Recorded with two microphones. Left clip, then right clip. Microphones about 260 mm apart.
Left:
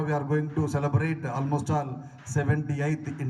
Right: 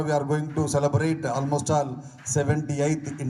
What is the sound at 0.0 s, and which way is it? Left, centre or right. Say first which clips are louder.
Speech: right 3 dB; centre.